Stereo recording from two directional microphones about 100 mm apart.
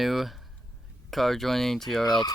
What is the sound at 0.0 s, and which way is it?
Speech, centre (ahead or behind).